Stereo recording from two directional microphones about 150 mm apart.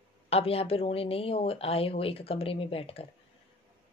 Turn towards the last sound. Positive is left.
turn(degrees=40)  # may be behind; listen again after turning